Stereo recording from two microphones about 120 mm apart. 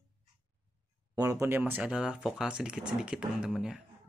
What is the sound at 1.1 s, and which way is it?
Speech, 25° right (ahead or behind).